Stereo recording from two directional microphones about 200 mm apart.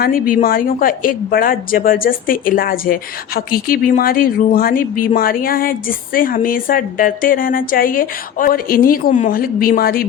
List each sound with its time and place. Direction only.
0.0 s speech: 45° left (ahead or behind)